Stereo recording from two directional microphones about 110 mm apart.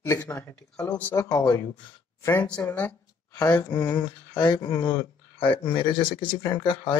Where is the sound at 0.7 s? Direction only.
15° left (ahead or behind).